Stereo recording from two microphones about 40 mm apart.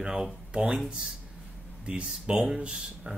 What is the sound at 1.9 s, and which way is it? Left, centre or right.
Speech, right.